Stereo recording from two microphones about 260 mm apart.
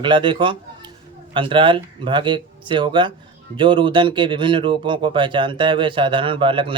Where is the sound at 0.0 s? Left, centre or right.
Centre.